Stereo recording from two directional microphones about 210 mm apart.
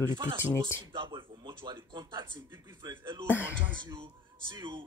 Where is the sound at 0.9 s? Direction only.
25° right (ahead or behind).